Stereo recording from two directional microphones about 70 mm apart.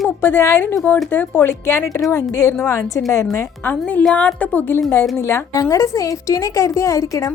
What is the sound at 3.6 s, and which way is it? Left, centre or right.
A woman's voice, centre.